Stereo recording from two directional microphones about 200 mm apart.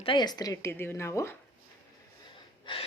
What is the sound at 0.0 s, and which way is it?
Speech, 25° left (ahead or behind).